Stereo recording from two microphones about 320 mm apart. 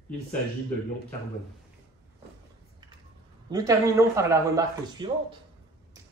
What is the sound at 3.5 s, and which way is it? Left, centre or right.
Speech, centre.